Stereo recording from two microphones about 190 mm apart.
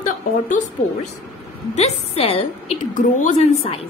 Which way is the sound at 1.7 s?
35° left (ahead or behind).